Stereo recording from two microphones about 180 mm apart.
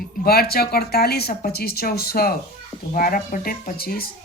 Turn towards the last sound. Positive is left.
turn(degrees=55)  # may be behind; listen again after turning